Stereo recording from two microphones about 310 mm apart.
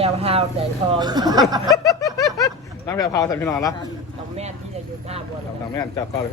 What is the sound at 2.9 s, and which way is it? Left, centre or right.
Speech, centre.